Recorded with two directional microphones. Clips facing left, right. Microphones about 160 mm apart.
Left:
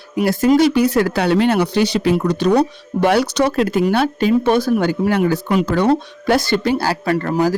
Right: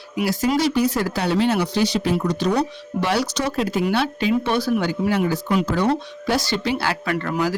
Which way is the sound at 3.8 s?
50° left (ahead or behind).